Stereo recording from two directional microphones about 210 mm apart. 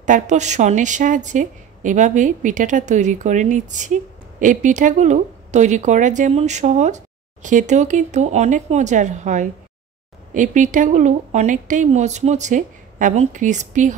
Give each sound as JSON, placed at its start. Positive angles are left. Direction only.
{"t": 0.0, "sound": "a woman's voice", "side_deg": -35}